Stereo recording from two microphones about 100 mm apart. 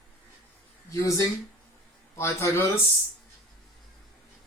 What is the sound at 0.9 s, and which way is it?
A man's voice, 35° left (ahead or behind).